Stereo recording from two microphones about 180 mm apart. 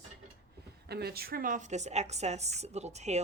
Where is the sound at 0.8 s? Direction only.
60° right (ahead or behind).